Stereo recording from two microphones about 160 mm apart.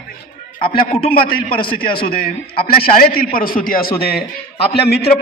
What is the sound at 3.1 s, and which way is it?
A man's voice, 65° left (ahead or behind).